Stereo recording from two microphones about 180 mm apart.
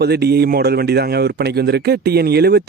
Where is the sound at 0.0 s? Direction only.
65° right (ahead or behind).